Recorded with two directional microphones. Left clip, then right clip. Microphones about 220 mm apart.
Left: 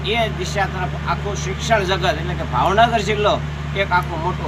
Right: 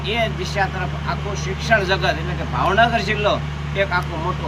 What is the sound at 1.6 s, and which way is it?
Speech, 5° right (ahead or behind).